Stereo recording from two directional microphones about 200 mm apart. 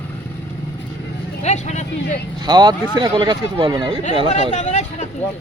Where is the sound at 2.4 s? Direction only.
20° right (ahead or behind).